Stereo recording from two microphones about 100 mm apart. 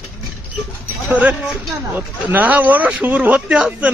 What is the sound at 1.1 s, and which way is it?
A man's voice, 15° right (ahead or behind).